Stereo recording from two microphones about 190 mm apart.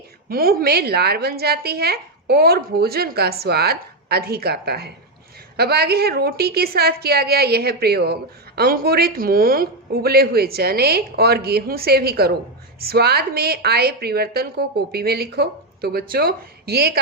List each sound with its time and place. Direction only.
0.3 s a woman's voice: 50° right (ahead or behind)